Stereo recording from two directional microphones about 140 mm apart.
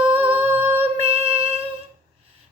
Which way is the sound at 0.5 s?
45° right (ahead or behind).